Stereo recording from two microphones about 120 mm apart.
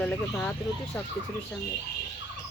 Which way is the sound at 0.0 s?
10° left (ahead or behind).